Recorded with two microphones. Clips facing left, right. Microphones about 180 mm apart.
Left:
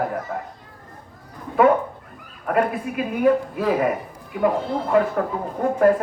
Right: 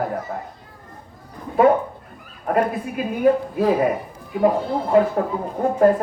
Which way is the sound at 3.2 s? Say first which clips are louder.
Right 2 dB; 35° right (ahead or behind).